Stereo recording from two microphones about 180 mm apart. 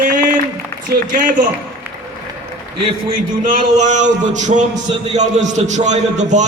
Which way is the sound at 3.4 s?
45° right (ahead or behind).